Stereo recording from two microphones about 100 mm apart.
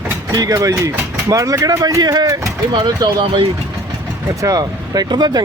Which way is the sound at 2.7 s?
50° right (ahead or behind).